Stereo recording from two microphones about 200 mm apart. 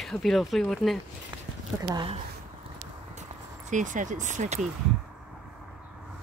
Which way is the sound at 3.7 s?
40° right (ahead or behind).